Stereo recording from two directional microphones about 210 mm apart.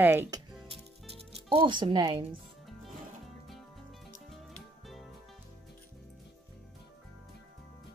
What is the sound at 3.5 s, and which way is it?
Music, centre (ahead or behind).